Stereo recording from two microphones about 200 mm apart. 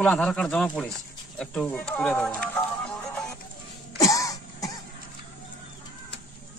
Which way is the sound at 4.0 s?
15° left (ahead or behind).